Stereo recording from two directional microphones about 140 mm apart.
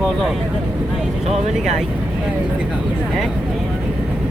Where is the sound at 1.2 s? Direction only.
50° right (ahead or behind).